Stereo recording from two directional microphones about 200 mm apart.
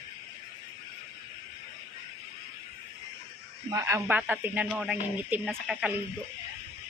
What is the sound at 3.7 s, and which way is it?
Speech, 15° right (ahead or behind).